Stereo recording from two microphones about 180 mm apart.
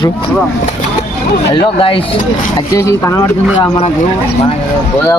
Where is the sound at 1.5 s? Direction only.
30° left (ahead or behind).